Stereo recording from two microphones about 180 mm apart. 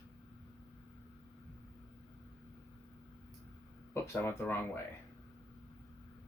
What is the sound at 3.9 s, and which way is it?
Speech, 15° left (ahead or behind).